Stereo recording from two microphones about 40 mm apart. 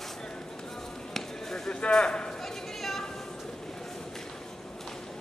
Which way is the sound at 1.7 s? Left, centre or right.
Left.